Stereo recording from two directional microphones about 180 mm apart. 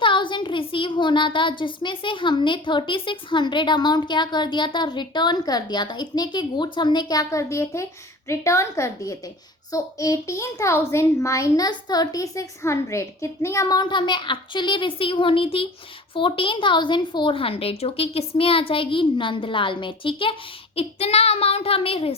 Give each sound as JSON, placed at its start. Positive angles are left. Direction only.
{"t": 0.0, "sound": "a woman's voice", "side_deg": 25}